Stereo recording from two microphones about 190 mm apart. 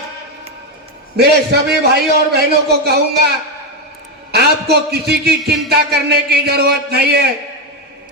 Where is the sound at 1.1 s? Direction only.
60° right (ahead or behind).